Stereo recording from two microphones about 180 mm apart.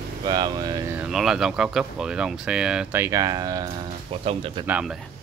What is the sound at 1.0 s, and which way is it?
Speech, 5° right (ahead or behind).